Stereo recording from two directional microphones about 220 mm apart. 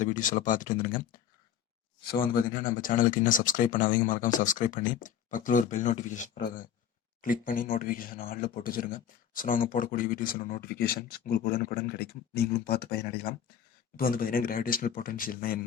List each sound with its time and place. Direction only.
0.0 s speech: 35° left (ahead or behind)